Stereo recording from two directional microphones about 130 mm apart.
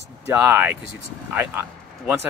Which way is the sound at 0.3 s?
15° right (ahead or behind).